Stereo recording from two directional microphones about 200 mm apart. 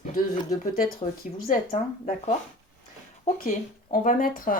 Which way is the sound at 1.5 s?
35° left (ahead or behind).